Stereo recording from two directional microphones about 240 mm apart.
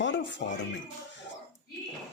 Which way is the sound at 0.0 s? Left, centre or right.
Left.